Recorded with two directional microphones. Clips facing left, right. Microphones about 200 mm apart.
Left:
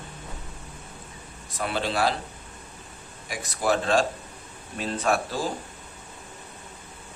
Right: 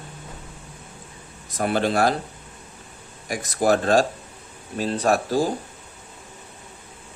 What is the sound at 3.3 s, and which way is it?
Speech, 45° right (ahead or behind).